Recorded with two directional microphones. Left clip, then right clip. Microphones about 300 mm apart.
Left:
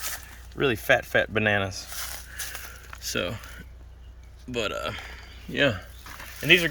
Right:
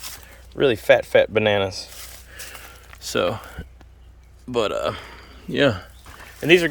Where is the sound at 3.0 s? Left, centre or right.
Centre.